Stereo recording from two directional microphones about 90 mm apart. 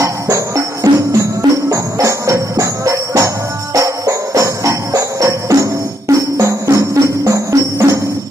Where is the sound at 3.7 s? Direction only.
35° right (ahead or behind).